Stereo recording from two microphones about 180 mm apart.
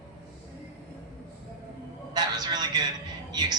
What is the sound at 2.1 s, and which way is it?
A man's voice, 20° right (ahead or behind).